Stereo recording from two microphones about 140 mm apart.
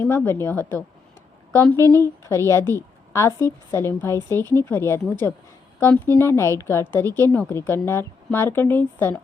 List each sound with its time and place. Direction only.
0.0 s a woman's voice: 15° left (ahead or behind)
1.8 s a woman's voice: 25° right (ahead or behind)
2.2 s a woman's voice: 20° left (ahead or behind)